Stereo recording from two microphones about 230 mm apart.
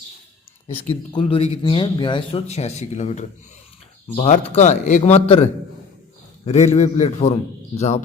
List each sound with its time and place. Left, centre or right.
1.1 s speech: left
6.4 s a man's voice: left